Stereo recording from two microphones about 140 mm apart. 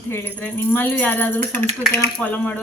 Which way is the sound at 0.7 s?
15° left (ahead or behind).